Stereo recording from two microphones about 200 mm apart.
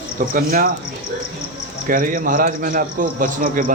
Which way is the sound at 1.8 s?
45° right (ahead or behind).